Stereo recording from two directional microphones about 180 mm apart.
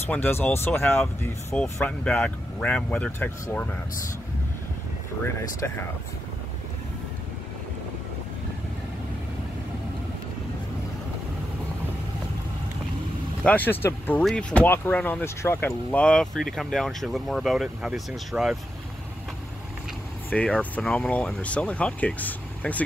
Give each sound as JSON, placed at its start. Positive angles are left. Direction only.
{"t": 0.1, "sound": "speech", "side_deg": 10}
{"t": 5.6, "sound": "speech", "side_deg": 15}
{"t": 13.4, "sound": "speech", "side_deg": 10}
{"t": 20.2, "sound": "speech", "side_deg": 5}